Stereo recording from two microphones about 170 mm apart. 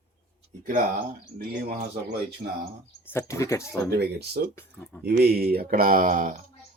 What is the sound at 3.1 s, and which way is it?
Speech, 20° left (ahead or behind).